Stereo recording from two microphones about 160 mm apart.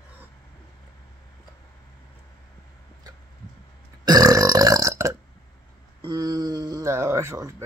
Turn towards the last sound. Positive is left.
turn(degrees=-15)  # may be behind; listen again after turning